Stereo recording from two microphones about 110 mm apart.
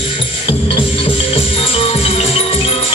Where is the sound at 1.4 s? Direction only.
60° left (ahead or behind).